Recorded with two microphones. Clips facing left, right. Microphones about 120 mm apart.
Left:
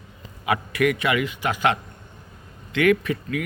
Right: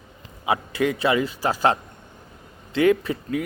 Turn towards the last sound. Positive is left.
turn(degrees=-30)  # may be behind; listen again after turning